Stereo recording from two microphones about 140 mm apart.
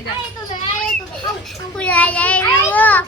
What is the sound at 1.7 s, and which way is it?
A child's voice, 10° left (ahead or behind).